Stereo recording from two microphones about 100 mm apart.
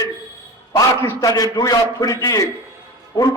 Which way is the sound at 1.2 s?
35° left (ahead or behind).